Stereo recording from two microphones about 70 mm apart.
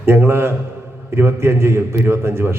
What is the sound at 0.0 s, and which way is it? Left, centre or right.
A man's voice, right.